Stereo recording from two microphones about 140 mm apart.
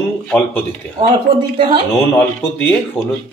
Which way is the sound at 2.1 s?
15° left (ahead or behind).